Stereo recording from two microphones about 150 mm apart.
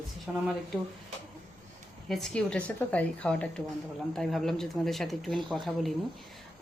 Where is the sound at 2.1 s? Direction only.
5° left (ahead or behind).